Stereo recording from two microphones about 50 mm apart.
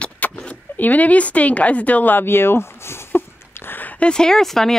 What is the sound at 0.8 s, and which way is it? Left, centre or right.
Speech, left.